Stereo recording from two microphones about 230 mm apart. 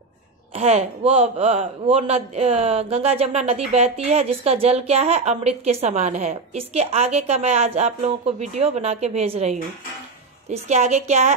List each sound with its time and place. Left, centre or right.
0.6 s a man's voice: right